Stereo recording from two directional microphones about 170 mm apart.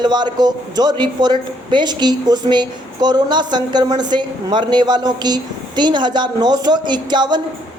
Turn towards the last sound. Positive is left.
turn(degrees=-25)  # may be behind; listen again after turning